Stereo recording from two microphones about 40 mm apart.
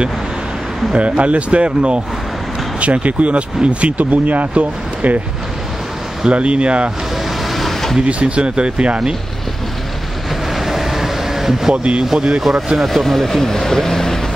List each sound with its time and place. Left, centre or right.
0.9 s speech: right
6.3 s speech: right
7.4 s a sound: centre
8.0 s speech: right
10.5 s vehicle: centre
11.7 s speech: right; by 12.8 s centre
12.8 s speech: centre